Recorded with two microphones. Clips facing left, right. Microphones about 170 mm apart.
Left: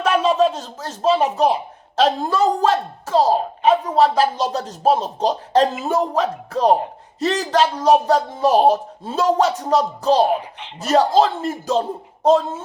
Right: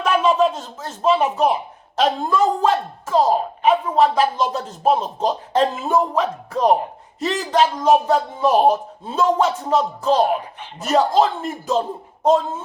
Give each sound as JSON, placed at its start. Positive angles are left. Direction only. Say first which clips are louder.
{"t": 0.0, "sound": "speech", "louder": "left 1 dB", "side_deg": 35}